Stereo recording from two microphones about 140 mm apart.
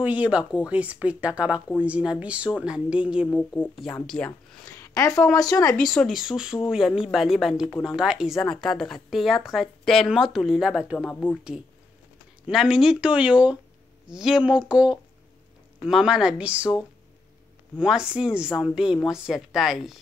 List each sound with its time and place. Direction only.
0.0 s speech: 10° right (ahead or behind)
3.3 s speech: 10° left (ahead or behind)
4.7 s a sound: 25° left (ahead or behind)
5.3 s speech: 25° left (ahead or behind)
5.8 s a woman's voice: centre (ahead or behind)
11.1 s speech: 10° left (ahead or behind)
12.4 s a woman's voice: centre (ahead or behind)